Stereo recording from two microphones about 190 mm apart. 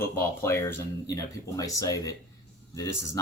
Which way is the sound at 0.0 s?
10° left (ahead or behind).